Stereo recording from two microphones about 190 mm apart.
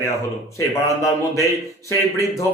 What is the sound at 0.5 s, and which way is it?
Speech, 15° left (ahead or behind).